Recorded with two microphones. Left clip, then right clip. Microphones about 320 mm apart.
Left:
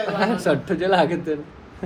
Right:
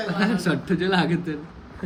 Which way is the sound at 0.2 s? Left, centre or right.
Centre.